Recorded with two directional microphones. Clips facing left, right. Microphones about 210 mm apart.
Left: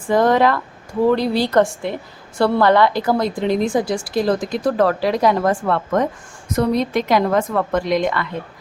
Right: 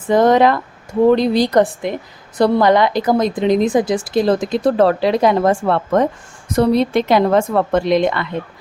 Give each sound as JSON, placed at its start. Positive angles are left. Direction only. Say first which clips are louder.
{"t": 0.1, "sound": "a woman's voice", "louder": "right 3 dB", "side_deg": -20}